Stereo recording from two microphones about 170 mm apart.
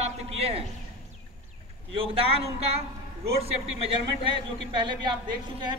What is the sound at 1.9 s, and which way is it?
A man's voice, 35° right (ahead or behind).